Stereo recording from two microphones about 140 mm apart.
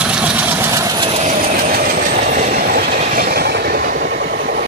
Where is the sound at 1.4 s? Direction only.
85° right.